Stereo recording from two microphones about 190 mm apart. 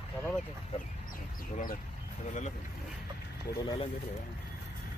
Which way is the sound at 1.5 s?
45° left (ahead or behind).